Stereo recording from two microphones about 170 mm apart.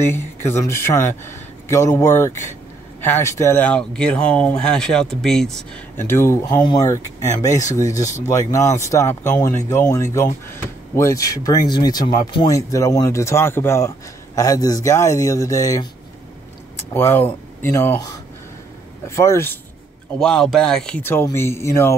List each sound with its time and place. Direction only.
0.0 s speech: 15° left (ahead or behind)
5.9 s speech: 15° left (ahead or behind)
20.2 s speech: 5° left (ahead or behind)